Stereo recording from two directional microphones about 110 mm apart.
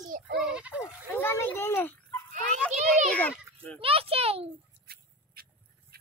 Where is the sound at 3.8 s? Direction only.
60° right (ahead or behind).